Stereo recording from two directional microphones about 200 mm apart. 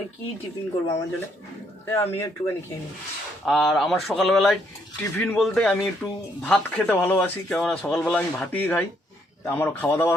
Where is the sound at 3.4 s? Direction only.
Centre (ahead or behind).